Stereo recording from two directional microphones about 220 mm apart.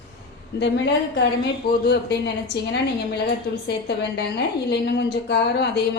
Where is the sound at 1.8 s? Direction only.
50° left (ahead or behind).